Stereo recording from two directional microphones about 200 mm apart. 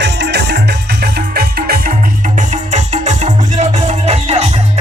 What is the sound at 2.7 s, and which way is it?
Music, 35° right (ahead or behind).